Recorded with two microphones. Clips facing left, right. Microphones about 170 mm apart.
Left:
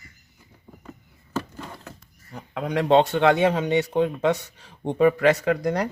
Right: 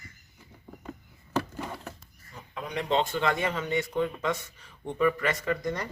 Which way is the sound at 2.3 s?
70° left (ahead or behind).